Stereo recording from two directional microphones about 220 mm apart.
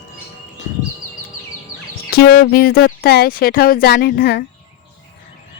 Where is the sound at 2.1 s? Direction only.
45° left (ahead or behind).